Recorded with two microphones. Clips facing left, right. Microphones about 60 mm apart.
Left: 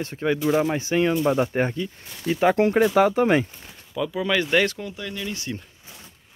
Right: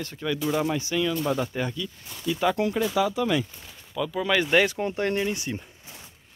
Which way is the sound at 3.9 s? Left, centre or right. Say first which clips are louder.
Left 1 dB; centre.